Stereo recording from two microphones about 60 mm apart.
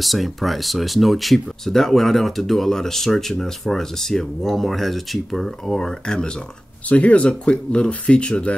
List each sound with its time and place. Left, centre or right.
0.0 s speech: centre
6.9 s speech: left